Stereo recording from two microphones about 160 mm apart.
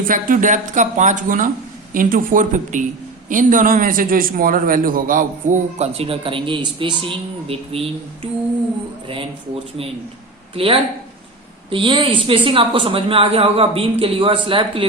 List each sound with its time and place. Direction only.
0.1 s a man's voice: 55° right (ahead or behind)
5.8 s a woman's voice: 35° right (ahead or behind)
10.5 s a woman's voice: 35° right (ahead or behind)